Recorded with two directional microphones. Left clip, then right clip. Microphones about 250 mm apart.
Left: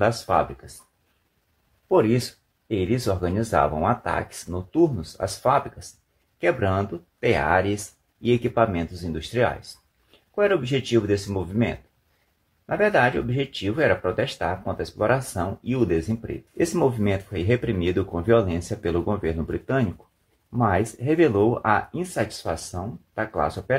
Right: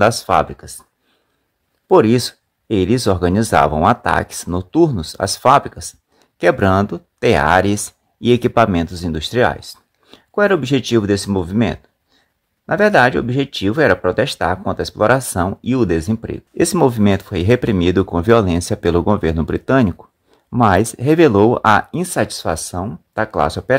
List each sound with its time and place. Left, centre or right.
0.0 s speech: right
1.9 s speech: right